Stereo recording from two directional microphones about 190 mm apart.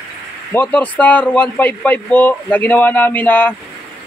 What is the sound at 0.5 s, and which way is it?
Speech, 10° left (ahead or behind).